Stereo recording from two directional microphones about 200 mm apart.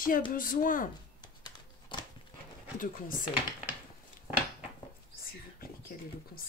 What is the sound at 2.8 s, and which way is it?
Speech, 40° left (ahead or behind).